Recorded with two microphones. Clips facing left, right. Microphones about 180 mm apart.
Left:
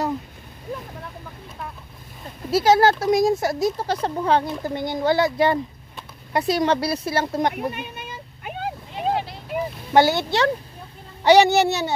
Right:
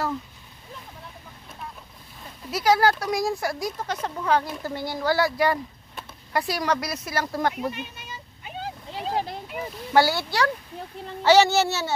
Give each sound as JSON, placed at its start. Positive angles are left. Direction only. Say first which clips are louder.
{"t": 2.5, "sound": "speech", "louder": "left 4 dB", "side_deg": 25}
{"t": 7.7, "sound": "vehicle", "louder": "left 4 dB", "side_deg": 55}
{"t": 9.1, "sound": "vehicle", "louder": "right 1 dB", "side_deg": -45}
{"t": 9.9, "sound": "speech", "louder": "left 3 dB", "side_deg": 20}